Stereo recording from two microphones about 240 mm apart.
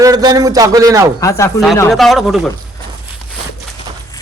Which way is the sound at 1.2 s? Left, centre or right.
Centre.